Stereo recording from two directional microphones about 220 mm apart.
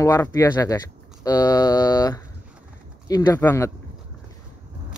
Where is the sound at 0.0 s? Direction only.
15° left (ahead or behind).